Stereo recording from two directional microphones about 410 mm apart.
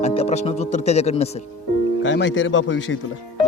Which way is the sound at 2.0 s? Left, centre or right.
Left.